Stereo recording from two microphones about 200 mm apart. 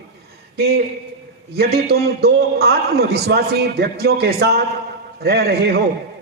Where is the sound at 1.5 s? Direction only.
55° right (ahead or behind).